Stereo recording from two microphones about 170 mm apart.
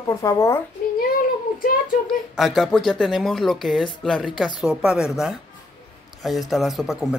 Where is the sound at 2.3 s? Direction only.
Centre (ahead or behind).